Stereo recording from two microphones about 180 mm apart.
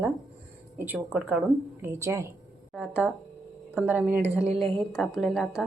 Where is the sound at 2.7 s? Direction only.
5° right (ahead or behind).